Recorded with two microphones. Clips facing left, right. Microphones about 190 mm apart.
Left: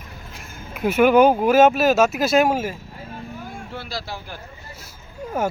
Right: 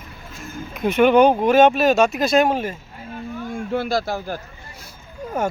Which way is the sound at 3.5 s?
50° right (ahead or behind).